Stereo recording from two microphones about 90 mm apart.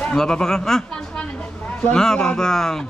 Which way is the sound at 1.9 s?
10° left (ahead or behind).